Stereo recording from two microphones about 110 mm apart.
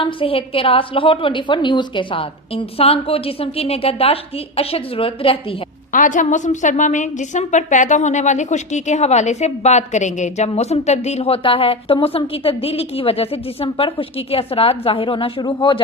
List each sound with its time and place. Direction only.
0.0 s a woman's voice: 55° left (ahead or behind)
6.4 s a woman's voice: 90° left; by 15.8 s 45° left (ahead or behind)